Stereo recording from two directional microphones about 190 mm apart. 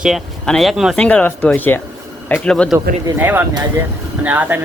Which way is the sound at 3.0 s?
10° right (ahead or behind).